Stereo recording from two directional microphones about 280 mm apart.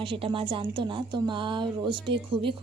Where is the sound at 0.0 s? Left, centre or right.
Centre.